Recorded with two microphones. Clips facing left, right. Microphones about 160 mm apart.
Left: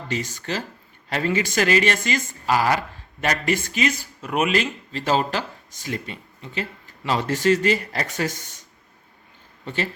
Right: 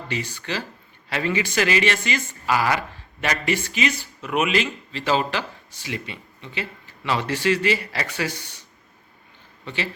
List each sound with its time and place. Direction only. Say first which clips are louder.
0.1 s speech: left 2 dB; 40° left (ahead or behind)
9.6 s speech: left 2 dB; 45° left (ahead or behind)